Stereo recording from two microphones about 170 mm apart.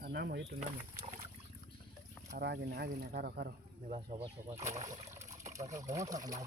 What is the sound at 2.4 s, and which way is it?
Speech, 65° right (ahead or behind).